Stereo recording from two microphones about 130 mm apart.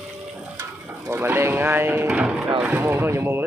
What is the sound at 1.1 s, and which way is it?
Speech, 15° right (ahead or behind).